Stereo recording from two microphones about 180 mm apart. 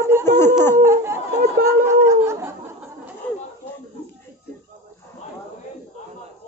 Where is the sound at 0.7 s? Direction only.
15° right (ahead or behind).